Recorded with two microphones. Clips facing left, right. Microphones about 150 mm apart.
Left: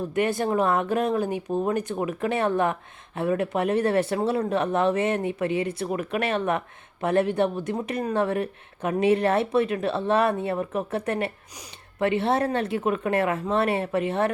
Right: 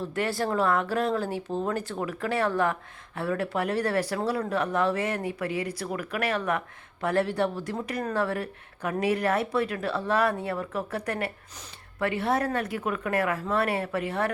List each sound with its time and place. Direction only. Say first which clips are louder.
0.0 s speech: left 4 dB; 20° left (ahead or behind)